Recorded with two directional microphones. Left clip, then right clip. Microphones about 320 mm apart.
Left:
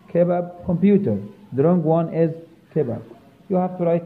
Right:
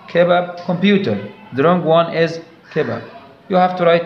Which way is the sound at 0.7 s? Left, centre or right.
Centre.